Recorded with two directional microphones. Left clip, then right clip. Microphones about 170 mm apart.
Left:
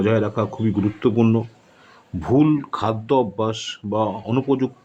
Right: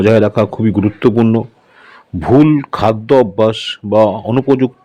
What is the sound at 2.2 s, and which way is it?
Speech, 30° right (ahead or behind).